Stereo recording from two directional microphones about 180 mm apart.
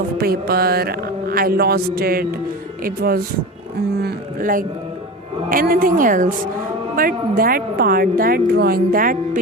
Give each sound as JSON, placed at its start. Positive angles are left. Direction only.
{"t": 0.2, "sound": "a woman's voice", "side_deg": -60}